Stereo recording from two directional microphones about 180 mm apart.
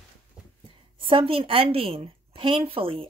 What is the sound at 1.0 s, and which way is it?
A woman's voice, 30° right (ahead or behind).